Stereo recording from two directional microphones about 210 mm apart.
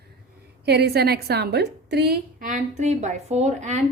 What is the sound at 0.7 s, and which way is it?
A woman's voice, 50° right (ahead or behind).